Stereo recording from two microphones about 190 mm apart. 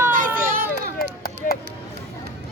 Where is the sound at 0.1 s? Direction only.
45° right (ahead or behind).